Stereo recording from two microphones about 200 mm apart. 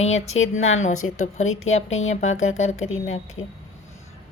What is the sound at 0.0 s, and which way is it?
A woman's voice, 35° left (ahead or behind).